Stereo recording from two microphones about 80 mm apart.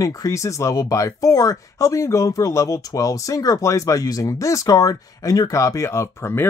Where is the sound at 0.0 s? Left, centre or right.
Left.